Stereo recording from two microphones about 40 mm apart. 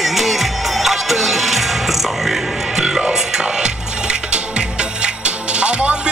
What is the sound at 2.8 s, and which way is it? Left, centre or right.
Music, centre.